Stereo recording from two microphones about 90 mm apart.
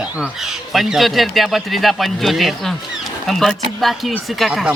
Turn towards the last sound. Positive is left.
turn(degrees=0)  # may be behind; listen again after turning